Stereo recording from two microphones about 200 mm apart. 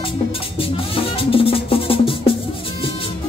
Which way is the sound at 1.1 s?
30° left (ahead or behind).